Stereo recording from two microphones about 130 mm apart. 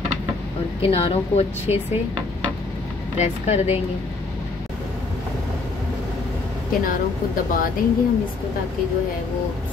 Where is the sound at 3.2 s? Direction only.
60° left (ahead or behind).